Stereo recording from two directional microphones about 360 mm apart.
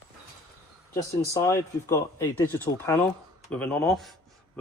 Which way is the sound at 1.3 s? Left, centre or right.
Centre.